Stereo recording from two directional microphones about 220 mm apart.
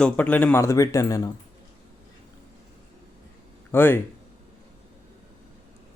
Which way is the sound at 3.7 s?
10° left (ahead or behind).